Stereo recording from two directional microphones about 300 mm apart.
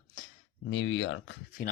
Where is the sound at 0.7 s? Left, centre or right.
Left.